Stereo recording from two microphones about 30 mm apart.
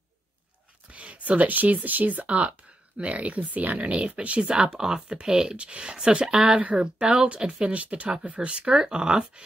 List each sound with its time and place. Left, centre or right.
0.9 s speech: right
2.2 s speech: right
4.4 s speech: right
4.7 s speech: centre
5.6 s speech: right
7.1 s speech: right